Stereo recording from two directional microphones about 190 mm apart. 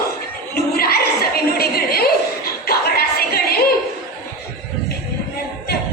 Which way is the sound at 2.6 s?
55° left (ahead or behind).